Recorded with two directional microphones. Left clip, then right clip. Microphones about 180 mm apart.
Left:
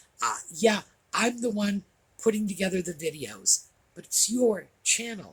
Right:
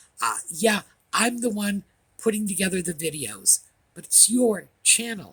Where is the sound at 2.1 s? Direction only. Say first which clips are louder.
Right 1 dB; 45° right (ahead or behind).